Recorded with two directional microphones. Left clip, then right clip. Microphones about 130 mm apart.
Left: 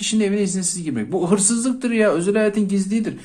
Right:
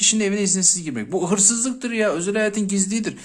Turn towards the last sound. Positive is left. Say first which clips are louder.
# left 1 dB
turn(degrees=-30)  # may be behind; listen again after turning